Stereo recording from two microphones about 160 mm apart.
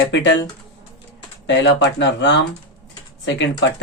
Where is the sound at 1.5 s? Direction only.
90° left.